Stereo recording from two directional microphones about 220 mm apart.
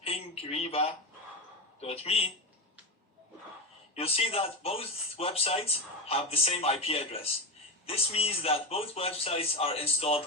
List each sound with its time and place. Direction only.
0.0 s speech: 25° left (ahead or behind)
3.9 s speech: 25° left (ahead or behind)